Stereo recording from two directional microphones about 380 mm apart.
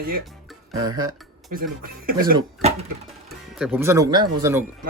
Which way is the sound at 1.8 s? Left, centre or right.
Right.